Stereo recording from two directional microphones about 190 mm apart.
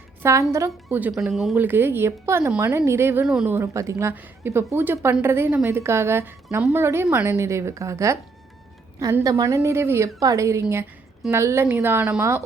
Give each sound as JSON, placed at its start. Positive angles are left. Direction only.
{"t": 0.2, "sound": "a woman's voice", "side_deg": -15}